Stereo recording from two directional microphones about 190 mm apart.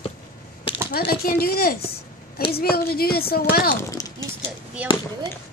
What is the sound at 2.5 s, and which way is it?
A woman's voice, 55° left (ahead or behind).